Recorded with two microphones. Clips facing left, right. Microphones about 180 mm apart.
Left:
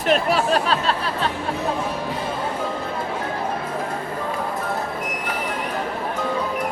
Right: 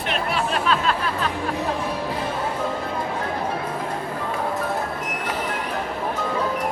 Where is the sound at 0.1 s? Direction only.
40° left (ahead or behind).